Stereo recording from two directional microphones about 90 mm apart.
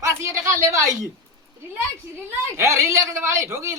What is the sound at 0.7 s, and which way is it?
Speech, 35° right (ahead or behind).